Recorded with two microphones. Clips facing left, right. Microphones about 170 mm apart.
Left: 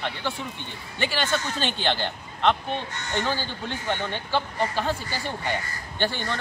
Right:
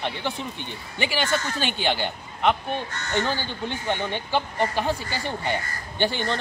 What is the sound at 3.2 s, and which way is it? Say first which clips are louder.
Speech: right 1 dB; 15° right (ahead or behind).